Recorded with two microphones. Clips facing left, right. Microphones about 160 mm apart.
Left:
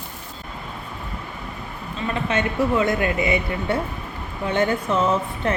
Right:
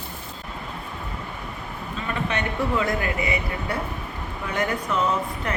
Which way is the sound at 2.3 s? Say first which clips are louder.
Left 5 dB; 25° left (ahead or behind).